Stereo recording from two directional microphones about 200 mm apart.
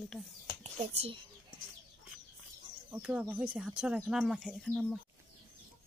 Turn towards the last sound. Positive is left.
turn(degrees=0)  # may be behind; listen again after turning